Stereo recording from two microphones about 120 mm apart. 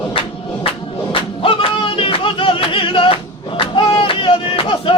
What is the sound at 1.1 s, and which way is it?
Music, 50° left (ahead or behind).